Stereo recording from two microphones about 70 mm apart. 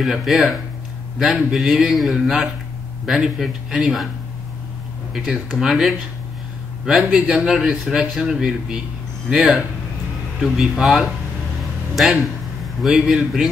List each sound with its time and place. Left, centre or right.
0.0 s a man's voice: centre
5.1 s a man's voice: centre